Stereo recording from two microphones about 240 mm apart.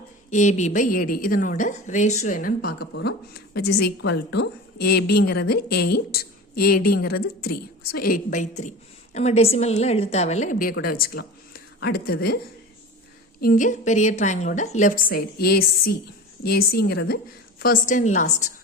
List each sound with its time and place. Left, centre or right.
0.3 s a woman's voice: left
13.4 s speech: left